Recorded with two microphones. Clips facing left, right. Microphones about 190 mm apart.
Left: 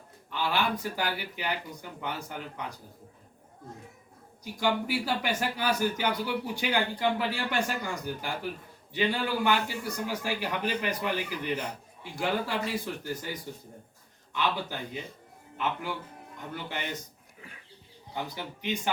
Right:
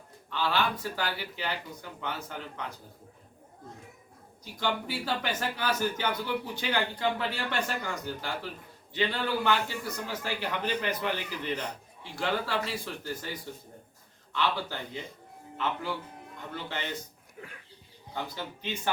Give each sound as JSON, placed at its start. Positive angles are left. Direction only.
{"t": 0.3, "sound": "a man's voice", "side_deg": 15}
{"t": 4.6, "sound": "a man's voice", "side_deg": 10}
{"t": 18.1, "sound": "a man's voice", "side_deg": 15}